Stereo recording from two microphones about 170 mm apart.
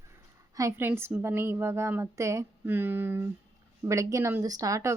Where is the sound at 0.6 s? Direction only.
15° right (ahead or behind).